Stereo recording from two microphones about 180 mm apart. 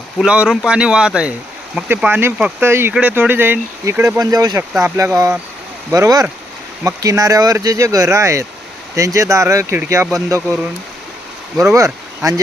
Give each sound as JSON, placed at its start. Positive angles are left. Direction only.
{"t": 0.2, "sound": "speech", "side_deg": -5}
{"t": 11.6, "sound": "speech", "side_deg": -15}